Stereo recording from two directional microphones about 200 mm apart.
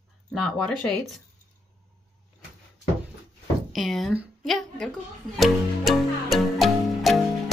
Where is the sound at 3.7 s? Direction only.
Centre (ahead or behind).